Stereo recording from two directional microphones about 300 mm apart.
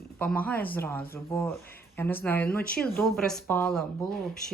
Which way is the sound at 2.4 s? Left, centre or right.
Left.